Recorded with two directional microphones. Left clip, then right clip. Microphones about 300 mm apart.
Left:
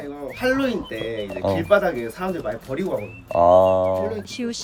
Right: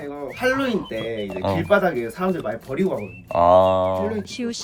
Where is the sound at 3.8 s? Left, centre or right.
Right.